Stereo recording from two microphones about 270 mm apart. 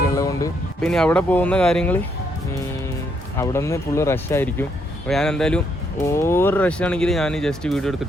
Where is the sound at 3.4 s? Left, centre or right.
Centre.